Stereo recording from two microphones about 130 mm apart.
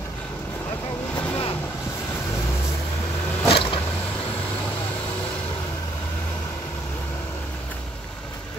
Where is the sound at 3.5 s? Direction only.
45° left (ahead or behind).